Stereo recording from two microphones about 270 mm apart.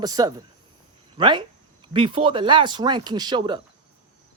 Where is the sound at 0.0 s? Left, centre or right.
Centre.